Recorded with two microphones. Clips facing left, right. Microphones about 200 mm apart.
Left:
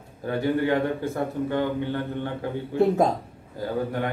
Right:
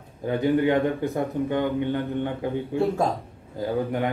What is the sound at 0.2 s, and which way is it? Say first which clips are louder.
A man's voice: right 2 dB; 20° right (ahead or behind).